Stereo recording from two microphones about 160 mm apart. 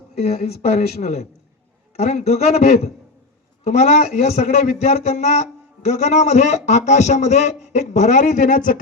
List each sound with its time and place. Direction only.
0.2 s speech: 40° left (ahead or behind)